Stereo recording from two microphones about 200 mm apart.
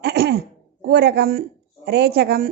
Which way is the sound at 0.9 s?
55° right (ahead or behind).